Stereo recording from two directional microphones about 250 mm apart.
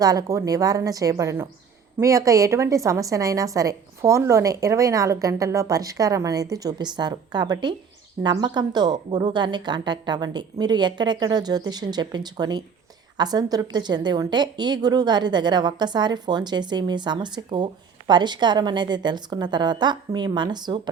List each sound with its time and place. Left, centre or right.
0.0 s a woman's voice: centre